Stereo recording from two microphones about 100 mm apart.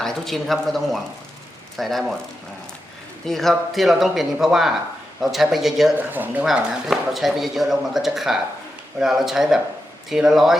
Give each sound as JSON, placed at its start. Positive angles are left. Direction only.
{"t": 0.0, "sound": "speech", "side_deg": 5}
{"t": 3.2, "sound": "speech", "side_deg": 0}
{"t": 6.0, "sound": "speech", "side_deg": -20}
{"t": 6.4, "sound": "speech", "side_deg": -5}